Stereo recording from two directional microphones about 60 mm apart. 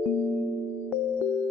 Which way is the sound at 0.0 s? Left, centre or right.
Left.